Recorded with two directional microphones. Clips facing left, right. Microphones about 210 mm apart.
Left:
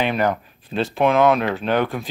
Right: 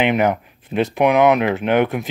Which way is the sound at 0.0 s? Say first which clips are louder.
Right 3 dB; 20° right (ahead or behind).